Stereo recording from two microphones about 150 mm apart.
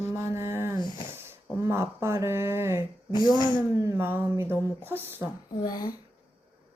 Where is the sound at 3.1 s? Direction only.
30° left (ahead or behind).